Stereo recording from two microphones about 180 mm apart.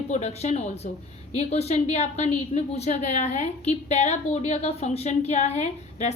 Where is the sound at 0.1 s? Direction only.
35° left (ahead or behind).